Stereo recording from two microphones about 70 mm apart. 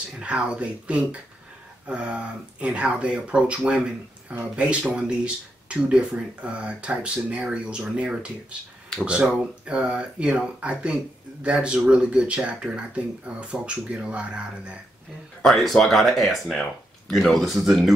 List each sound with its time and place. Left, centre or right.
0.2 s speech: centre
15.4 s speech: centre